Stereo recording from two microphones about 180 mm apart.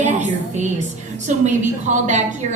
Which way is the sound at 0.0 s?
40° right (ahead or behind).